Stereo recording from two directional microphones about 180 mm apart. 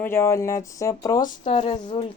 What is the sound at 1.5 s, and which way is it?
Speech, 35° left (ahead or behind).